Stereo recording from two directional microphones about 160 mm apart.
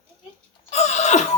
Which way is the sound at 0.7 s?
45° left (ahead or behind).